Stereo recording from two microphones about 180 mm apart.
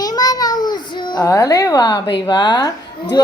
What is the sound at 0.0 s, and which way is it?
A child's voice, 20° left (ahead or behind).